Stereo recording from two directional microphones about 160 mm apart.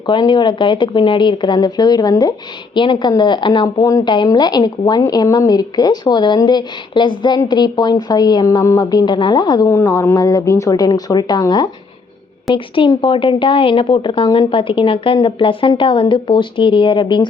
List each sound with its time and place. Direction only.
0.0 s a woman's voice: 30° left (ahead or behind)